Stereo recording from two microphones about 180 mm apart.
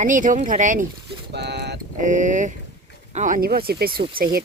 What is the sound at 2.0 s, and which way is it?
Speech, 45° right (ahead or behind).